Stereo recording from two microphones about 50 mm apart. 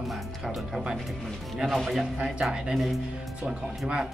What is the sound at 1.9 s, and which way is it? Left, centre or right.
Music, centre.